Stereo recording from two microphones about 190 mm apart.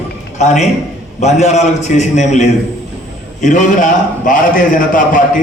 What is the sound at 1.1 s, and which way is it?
A man's voice, 35° left (ahead or behind).